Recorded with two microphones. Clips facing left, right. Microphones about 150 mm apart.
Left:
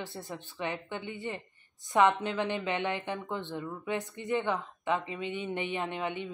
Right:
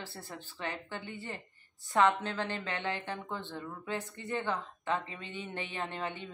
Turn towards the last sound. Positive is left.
turn(degrees=15)  # may be behind; listen again after turning